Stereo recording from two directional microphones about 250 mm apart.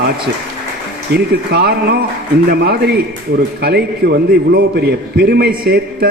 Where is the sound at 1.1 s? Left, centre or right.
Right.